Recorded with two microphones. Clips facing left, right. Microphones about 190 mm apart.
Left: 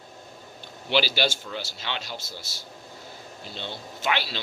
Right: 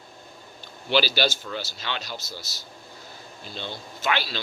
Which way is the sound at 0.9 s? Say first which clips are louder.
Right 1 dB; 20° left (ahead or behind).